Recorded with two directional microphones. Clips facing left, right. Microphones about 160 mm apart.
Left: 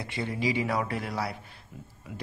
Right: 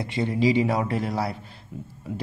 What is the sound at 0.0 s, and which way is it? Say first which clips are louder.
A man's voice: right 7 dB; 20° right (ahead or behind).